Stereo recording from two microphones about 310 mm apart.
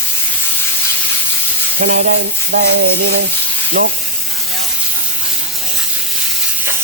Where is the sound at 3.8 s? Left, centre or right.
Right.